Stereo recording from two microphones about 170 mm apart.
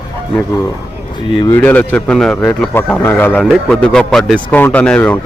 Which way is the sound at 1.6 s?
10° left (ahead or behind).